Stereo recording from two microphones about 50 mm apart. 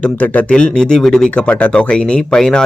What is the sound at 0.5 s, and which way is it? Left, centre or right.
Speech, centre.